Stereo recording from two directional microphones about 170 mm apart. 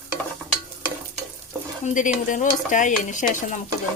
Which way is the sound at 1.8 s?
50° left (ahead or behind).